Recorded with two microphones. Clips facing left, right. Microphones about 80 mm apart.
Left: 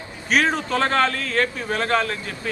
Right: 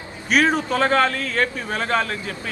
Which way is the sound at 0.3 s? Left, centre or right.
Centre.